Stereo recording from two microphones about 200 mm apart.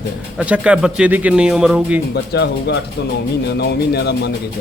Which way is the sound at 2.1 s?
55° left (ahead or behind).